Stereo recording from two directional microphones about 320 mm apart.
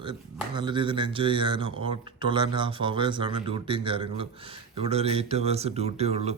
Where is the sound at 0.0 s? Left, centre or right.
Centre.